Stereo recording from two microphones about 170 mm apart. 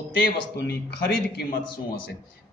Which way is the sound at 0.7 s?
70° left (ahead or behind).